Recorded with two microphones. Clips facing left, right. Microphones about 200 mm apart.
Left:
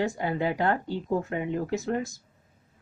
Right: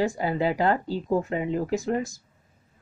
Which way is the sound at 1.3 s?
90° right.